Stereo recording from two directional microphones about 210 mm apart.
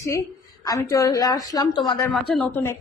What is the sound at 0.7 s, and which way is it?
A woman's voice, 15° left (ahead or behind).